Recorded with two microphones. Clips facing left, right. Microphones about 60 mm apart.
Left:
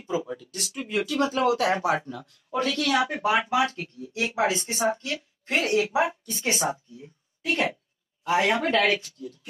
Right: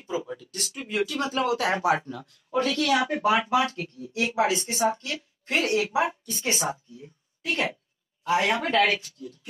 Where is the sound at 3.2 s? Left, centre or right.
Centre.